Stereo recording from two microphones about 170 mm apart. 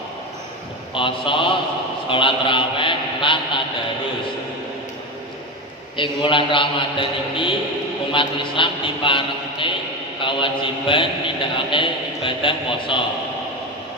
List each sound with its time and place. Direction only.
0.9 s a man's voice: 30° left (ahead or behind)
6.0 s a man's voice: 30° left (ahead or behind)